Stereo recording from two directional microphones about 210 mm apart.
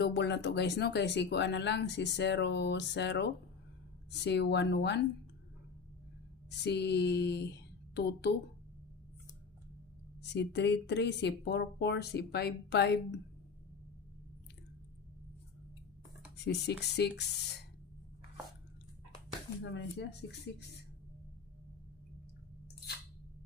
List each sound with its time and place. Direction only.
0.0 s speech: 55° left (ahead or behind)
6.5 s a sound: 55° left (ahead or behind)
10.2 s speech: 55° left (ahead or behind)
16.4 s speech: 55° left (ahead or behind)
19.6 s speech: 55° left (ahead or behind)